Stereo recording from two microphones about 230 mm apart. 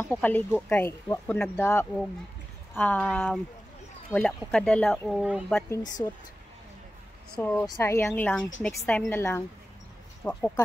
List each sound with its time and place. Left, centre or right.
0.0 s speech: centre
5.7 s speech: centre
7.3 s speech: centre